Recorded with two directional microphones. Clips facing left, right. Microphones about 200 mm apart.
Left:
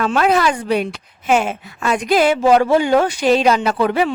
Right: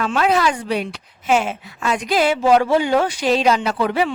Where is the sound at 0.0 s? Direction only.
50° left (ahead or behind).